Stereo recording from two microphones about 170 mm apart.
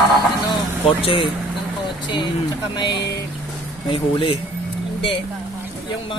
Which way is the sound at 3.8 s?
30° left (ahead or behind).